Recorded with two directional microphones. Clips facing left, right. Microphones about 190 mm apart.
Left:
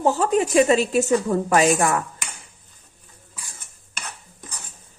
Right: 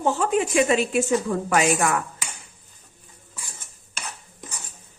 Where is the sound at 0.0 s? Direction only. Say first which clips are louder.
Left 2 dB; 35° left (ahead or behind).